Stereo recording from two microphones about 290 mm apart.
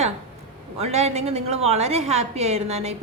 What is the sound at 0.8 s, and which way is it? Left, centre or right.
A woman's voice, right.